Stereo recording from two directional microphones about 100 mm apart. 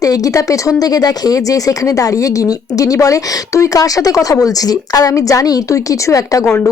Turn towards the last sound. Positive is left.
turn(degrees=35)  # may be behind; listen again after turning